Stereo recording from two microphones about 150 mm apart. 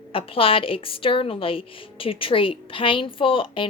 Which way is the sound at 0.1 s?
35° left (ahead or behind).